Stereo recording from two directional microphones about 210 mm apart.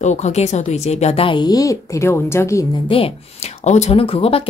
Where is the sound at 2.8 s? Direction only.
25° left (ahead or behind).